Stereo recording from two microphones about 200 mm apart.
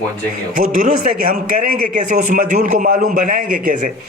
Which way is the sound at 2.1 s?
40° right (ahead or behind).